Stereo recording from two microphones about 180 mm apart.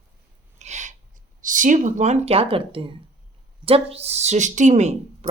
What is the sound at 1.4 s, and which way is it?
Speech, 45° right (ahead or behind).